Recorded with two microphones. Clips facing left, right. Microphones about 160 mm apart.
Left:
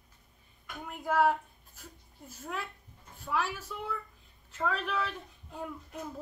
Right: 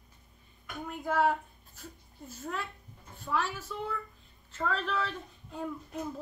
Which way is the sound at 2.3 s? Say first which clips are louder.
Right 1 dB; 10° left (ahead or behind).